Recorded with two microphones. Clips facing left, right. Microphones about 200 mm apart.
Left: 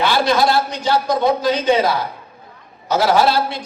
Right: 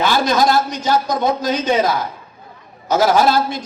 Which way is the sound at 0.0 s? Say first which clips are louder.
Even; 45° right (ahead or behind).